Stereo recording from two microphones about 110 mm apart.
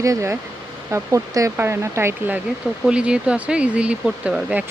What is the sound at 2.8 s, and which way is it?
Speech, 10° right (ahead or behind).